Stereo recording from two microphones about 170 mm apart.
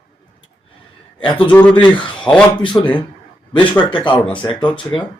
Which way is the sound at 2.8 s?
20° left (ahead or behind).